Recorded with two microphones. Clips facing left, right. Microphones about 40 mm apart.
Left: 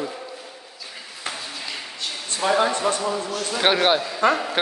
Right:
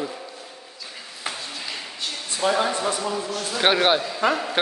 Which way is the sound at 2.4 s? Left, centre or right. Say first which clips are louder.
Left 2 dB; centre.